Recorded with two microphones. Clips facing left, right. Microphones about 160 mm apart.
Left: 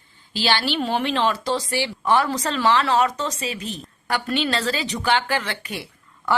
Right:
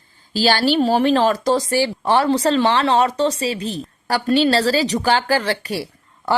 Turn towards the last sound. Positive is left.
turn(degrees=-35)  # may be behind; listen again after turning